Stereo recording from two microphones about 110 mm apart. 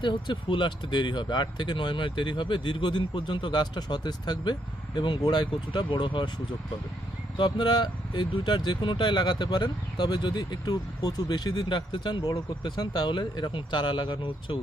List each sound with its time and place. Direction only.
0.0 s speech: 45° left (ahead or behind)
7.3 s speech: 45° left (ahead or behind)